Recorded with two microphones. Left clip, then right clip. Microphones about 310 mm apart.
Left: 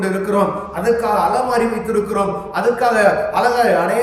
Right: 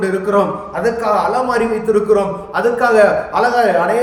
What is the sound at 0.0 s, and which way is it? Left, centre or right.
A man's voice, centre.